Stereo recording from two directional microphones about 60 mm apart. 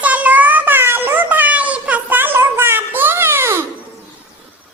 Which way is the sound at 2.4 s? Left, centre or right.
Right.